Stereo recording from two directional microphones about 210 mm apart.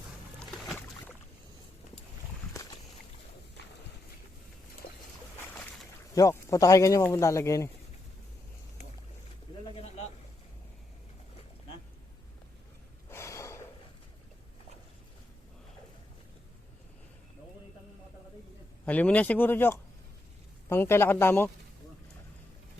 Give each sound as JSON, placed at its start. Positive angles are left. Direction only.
{"t": 3.6, "sound": "clip-clop", "side_deg": 55}
{"t": 6.1, "sound": "speech", "side_deg": 15}
{"t": 9.7, "sound": "a sound", "side_deg": 30}
{"t": 13.1, "sound": "gasp", "side_deg": 15}
{"t": 18.9, "sound": "speech", "side_deg": 5}